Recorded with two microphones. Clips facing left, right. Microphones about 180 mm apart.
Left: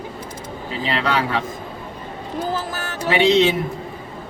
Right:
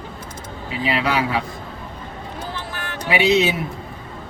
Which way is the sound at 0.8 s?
10° right (ahead or behind).